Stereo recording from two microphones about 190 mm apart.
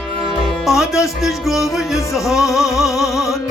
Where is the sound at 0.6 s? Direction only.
Centre (ahead or behind).